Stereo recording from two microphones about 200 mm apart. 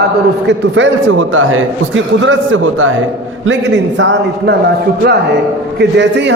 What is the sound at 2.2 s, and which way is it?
Speech, 70° right (ahead or behind).